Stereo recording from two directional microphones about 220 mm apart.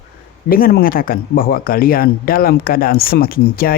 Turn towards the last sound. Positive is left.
turn(degrees=40)  # may be behind; listen again after turning